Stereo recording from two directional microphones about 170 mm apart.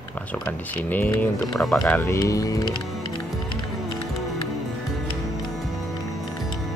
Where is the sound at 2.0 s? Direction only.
20° left (ahead or behind).